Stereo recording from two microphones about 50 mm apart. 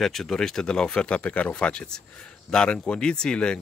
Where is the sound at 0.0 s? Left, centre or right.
Centre.